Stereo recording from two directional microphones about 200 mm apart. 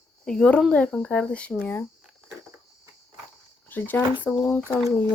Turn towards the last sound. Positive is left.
turn(degrees=5)  # may be behind; listen again after turning